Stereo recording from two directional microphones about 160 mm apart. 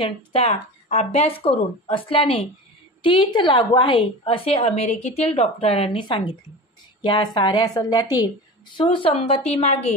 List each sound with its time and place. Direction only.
0.3 s a woman's voice: 40° left (ahead or behind); by 8.3 s 25° left (ahead or behind)
8.7 s a woman's voice: 35° left (ahead or behind)